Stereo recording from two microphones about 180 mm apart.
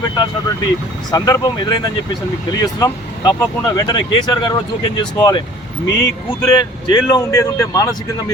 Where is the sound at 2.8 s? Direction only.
20° left (ahead or behind).